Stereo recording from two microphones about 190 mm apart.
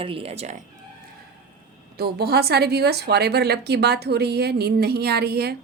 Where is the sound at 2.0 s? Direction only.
55° right (ahead or behind).